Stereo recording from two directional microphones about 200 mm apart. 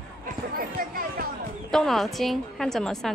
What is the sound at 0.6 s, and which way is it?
Speech, 45° right (ahead or behind).